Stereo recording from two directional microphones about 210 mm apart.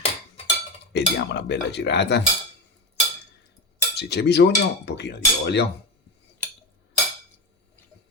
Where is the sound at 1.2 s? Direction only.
55° left (ahead or behind).